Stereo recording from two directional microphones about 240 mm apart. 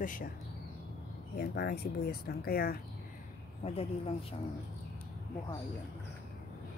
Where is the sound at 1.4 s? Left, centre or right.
Left.